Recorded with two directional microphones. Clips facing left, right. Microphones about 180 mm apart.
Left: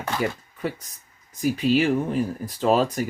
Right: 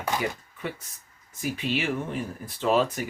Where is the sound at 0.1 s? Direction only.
15° right (ahead or behind).